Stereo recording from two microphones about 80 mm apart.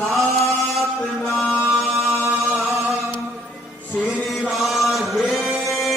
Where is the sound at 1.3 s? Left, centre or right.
Centre.